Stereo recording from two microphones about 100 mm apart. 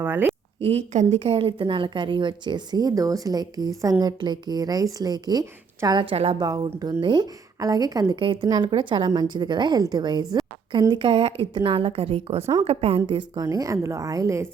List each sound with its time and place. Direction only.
0.0 s speech: 20° right (ahead or behind)
0.6 s a woman's voice: 80° right; by 6.0 s 40° right (ahead or behind)
6.0 s a woman's voice: 65° right (ahead or behind)
6.4 s a woman's voice: 35° right (ahead or behind)
7.6 s a woman's voice: 35° right (ahead or behind)
8.2 s a woman's voice: 60° right (ahead or behind); by 13.0 s 90° right
13.1 s a woman's voice: 50° right (ahead or behind)
13.4 s a woman's voice: 35° right (ahead or behind)